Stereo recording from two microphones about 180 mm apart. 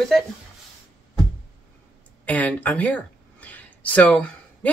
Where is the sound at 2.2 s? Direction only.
10° left (ahead or behind).